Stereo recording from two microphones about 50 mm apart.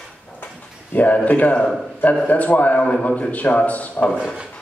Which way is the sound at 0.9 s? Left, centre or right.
Left.